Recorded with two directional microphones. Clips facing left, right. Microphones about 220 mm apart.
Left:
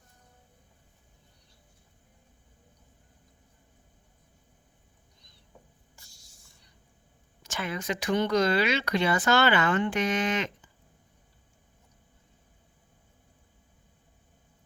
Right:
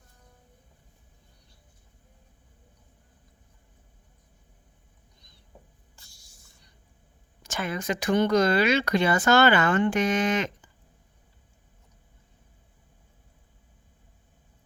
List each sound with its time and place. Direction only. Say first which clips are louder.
7.4 s speech: right 3 dB; 45° right (ahead or behind)